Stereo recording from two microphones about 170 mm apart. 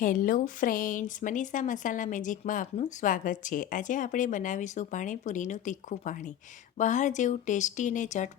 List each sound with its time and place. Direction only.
0.0 s speech: 50° left (ahead or behind)